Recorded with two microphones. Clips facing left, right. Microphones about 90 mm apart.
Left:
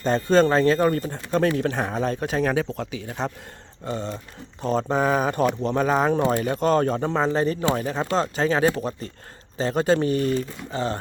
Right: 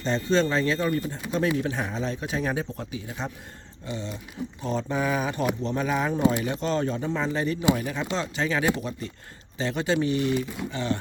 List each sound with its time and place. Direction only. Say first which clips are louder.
0.0 s speech: left 5 dB; 50° left (ahead or behind); by 3.3 s 65° left (ahead or behind)
3.8 s speech: left 5 dB; 45° left (ahead or behind)